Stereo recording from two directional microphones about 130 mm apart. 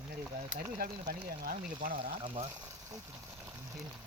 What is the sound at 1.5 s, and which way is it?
Speech, 90° right.